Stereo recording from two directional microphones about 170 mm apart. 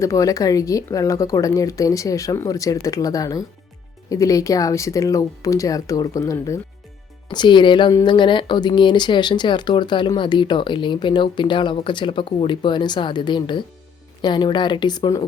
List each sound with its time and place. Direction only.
0.0 s speech: 20° left (ahead or behind)